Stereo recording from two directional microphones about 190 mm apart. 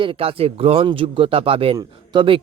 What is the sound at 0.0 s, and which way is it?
Speech, 30° right (ahead or behind).